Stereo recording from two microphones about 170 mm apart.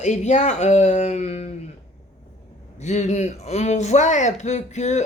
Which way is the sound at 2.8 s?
40° left (ahead or behind).